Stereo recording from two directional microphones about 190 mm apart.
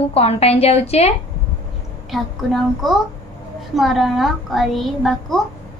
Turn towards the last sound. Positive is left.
turn(degrees=0)  # may be behind; listen again after turning